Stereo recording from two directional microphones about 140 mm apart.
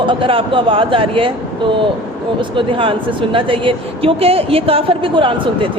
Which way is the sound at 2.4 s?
40° right (ahead or behind).